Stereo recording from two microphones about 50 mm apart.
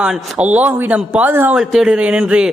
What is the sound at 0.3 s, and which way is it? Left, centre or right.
A man's voice, right.